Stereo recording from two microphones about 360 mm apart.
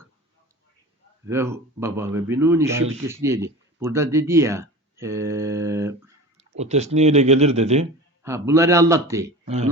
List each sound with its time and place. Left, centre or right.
1.3 s speech: centre
6.6 s speech: centre
8.2 s speech: centre